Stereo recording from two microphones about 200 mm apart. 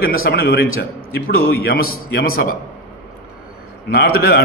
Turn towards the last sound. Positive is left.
turn(degrees=50)  # may be behind; listen again after turning